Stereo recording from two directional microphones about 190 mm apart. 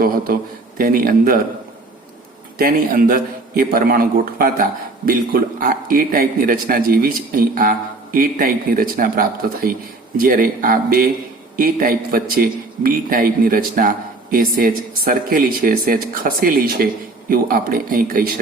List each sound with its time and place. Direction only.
0.8 s a man's voice: 50° right (ahead or behind)
2.6 s a man's voice: 50° right (ahead or behind)